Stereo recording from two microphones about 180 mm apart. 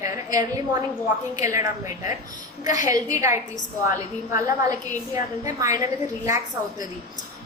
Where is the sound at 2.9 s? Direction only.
20° right (ahead or behind).